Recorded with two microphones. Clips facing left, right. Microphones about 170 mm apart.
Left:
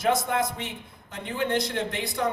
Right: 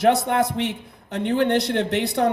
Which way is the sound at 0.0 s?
65° right (ahead or behind).